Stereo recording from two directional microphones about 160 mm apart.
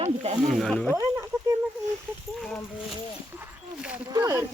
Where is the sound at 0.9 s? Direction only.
15° right (ahead or behind).